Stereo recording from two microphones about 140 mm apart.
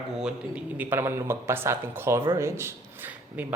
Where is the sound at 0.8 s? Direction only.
15° right (ahead or behind).